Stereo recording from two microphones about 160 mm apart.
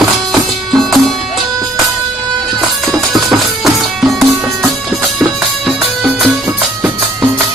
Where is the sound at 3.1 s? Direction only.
Centre (ahead or behind).